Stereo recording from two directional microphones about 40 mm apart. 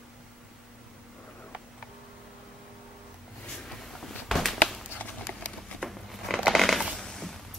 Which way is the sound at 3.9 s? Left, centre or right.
Centre.